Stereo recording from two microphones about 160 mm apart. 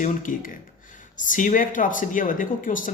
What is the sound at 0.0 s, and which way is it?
Speech, 55° left (ahead or behind).